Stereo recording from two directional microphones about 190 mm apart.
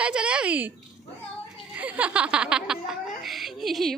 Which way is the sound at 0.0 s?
5° right (ahead or behind).